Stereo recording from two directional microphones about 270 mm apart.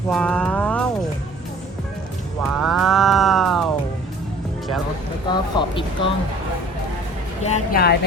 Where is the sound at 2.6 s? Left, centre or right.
Centre.